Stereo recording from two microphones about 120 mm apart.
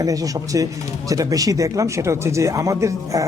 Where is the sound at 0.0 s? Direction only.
30° right (ahead or behind).